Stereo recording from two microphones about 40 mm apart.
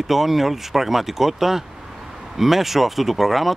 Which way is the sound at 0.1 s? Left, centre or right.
Centre.